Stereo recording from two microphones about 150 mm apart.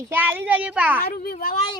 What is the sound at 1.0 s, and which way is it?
Speech, 90° left.